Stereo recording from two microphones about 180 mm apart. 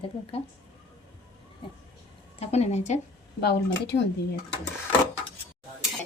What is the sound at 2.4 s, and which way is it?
Speech, 35° left (ahead or behind).